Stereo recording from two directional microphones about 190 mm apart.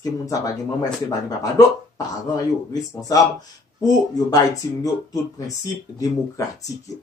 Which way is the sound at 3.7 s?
20° left (ahead or behind).